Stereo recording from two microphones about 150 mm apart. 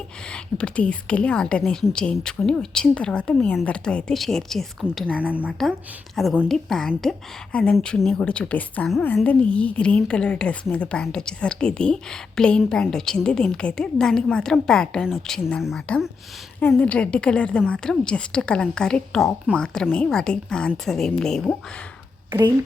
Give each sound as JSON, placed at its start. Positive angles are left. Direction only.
{"t": 0.3, "sound": "a woman's voice", "side_deg": 5}
{"t": 5.2, "sound": "a woman's voice", "side_deg": -10}
{"t": 16.6, "sound": "a woman's voice", "side_deg": 10}
{"t": 22.3, "sound": "speech", "side_deg": -20}